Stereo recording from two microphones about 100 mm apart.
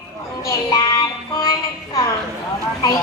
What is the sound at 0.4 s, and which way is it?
Child singing, 30° left (ahead or behind).